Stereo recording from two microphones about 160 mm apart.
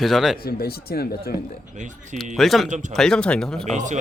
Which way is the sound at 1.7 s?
50° right (ahead or behind).